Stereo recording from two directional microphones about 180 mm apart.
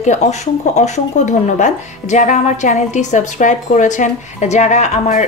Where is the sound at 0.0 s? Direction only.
40° left (ahead or behind).